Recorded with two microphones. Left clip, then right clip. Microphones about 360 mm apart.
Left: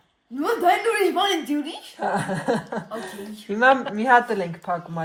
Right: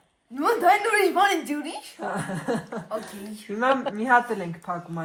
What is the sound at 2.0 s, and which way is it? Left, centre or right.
Speech, left.